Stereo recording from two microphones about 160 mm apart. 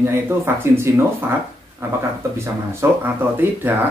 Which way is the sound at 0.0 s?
15° right (ahead or behind).